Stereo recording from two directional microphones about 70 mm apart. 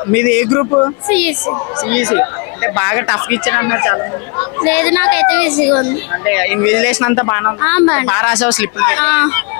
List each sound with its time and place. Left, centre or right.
0.1 s speech: centre
0.7 s a woman's voice: left
1.0 s speech: centre